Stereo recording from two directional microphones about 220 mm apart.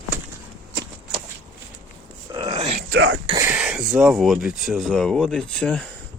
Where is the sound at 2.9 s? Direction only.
55° right (ahead or behind).